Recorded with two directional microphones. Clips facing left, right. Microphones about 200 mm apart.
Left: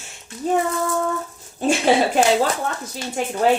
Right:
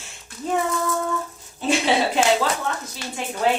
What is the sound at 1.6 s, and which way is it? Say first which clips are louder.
Speech: left 3 dB; 45° left (ahead or behind).